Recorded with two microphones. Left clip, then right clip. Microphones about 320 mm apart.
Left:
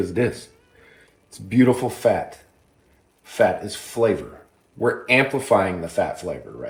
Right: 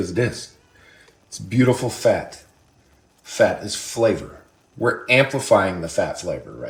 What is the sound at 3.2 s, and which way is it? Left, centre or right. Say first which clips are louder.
Speech: right 1 dB; left.